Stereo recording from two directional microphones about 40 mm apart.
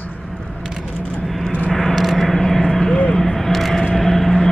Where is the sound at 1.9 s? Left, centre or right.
Centre.